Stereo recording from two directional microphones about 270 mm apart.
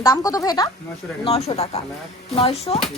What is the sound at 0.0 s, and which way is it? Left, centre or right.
A woman's voice, centre.